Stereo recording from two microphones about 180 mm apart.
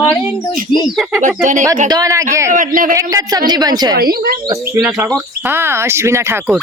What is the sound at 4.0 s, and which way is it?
Speech, 55° right (ahead or behind).